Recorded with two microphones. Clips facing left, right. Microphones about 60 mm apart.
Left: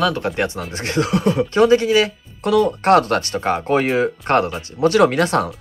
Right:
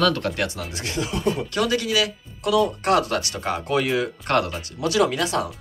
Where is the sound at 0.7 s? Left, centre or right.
Left.